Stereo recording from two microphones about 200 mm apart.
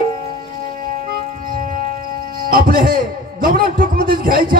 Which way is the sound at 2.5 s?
45° right (ahead or behind).